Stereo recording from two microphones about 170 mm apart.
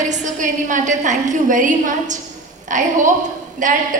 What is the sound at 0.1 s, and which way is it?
A woman's voice, 45° right (ahead or behind).